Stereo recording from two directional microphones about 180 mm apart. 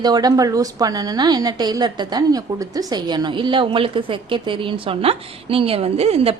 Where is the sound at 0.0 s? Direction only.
20° right (ahead or behind).